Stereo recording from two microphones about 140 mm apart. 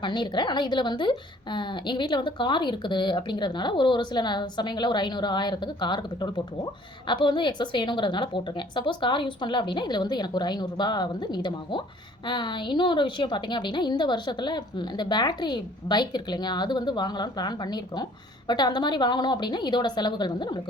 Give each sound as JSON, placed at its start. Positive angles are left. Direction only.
{"t": 0.0, "sound": "a woman's voice", "side_deg": 35}